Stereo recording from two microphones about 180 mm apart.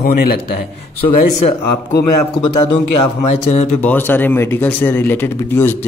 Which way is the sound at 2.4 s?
25° left (ahead or behind).